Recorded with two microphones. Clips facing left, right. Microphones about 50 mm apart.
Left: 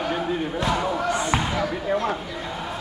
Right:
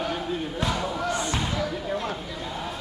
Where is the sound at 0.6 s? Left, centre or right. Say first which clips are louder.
Left 4 dB; left.